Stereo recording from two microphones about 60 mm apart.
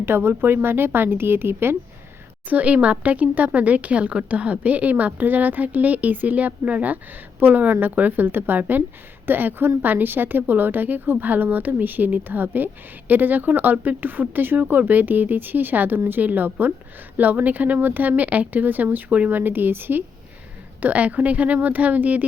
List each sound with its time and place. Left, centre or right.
0.0 s speech: right
2.5 s speech: right